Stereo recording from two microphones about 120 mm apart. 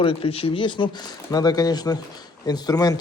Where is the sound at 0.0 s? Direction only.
50° left (ahead or behind).